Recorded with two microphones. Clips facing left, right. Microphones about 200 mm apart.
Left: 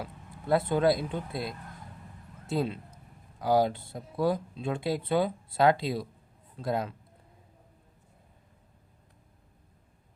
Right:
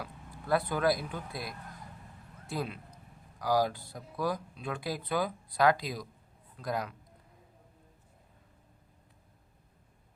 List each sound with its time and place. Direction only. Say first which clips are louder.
0.0 s a man's voice: left 3 dB; 25° left (ahead or behind)